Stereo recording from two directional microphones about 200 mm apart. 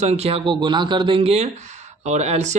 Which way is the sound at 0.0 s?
30° right (ahead or behind).